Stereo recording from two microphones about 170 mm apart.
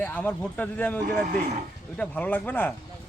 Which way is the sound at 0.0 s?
10° left (ahead or behind).